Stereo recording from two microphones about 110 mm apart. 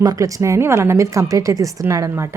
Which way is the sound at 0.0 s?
30° right (ahead or behind).